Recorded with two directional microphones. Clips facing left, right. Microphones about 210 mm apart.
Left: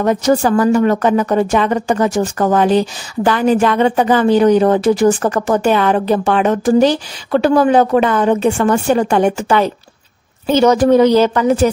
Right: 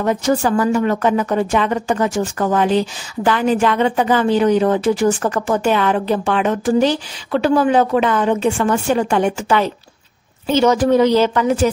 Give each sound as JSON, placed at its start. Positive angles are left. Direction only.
{"t": 0.0, "sound": "a woman's voice", "side_deg": 40}